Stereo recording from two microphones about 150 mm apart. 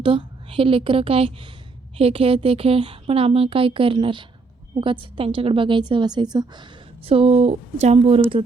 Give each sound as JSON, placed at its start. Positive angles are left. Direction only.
{"t": 0.0, "sound": "a woman's voice", "side_deg": -35}